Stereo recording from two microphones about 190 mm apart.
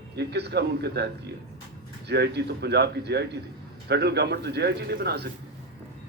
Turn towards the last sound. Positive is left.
turn(degrees=-60)  # may be behind; listen again after turning